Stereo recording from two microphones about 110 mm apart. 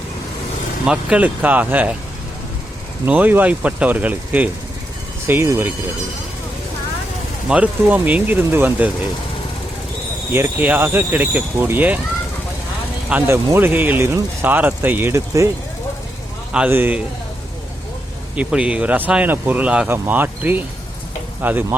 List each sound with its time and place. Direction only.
0.9 s speech: 10° right (ahead or behind)
3.1 s speech: 15° right (ahead or behind)
7.4 s speech: 10° right (ahead or behind)
10.3 s speech: 20° right (ahead or behind)
13.1 s speech: 20° right (ahead or behind)
16.5 s speech: 15° right (ahead or behind)
18.3 s speech: 10° right (ahead or behind)